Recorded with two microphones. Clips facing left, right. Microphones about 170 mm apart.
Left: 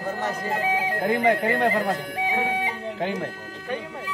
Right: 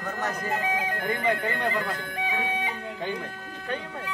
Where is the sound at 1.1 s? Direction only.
90° left.